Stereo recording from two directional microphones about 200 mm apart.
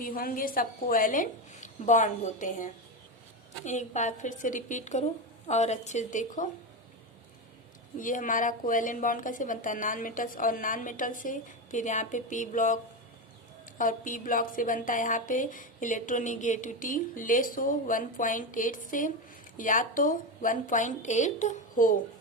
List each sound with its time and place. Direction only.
0.0 s a woman's voice: 45° left (ahead or behind)
7.9 s speech: 40° left (ahead or behind)